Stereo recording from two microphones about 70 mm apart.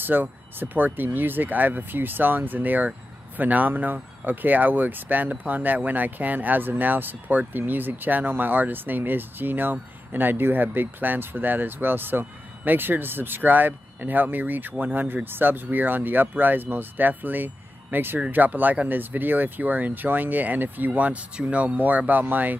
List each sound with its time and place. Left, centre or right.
0.0 s speech: right